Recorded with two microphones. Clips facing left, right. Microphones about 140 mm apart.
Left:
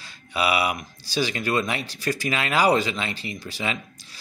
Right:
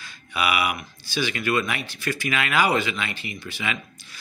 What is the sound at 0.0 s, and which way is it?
Speech, 30° left (ahead or behind).